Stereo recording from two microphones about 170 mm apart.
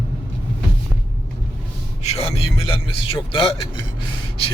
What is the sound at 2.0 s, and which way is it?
A man's voice, 35° left (ahead or behind).